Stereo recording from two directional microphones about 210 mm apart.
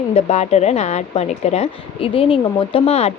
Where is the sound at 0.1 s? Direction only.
30° left (ahead or behind).